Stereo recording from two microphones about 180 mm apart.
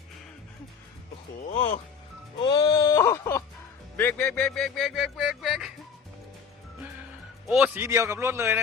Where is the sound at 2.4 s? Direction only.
20° left (ahead or behind); by 5.7 s centre (ahead or behind).